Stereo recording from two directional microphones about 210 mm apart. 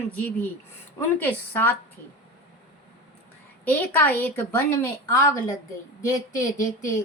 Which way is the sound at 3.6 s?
10° left (ahead or behind).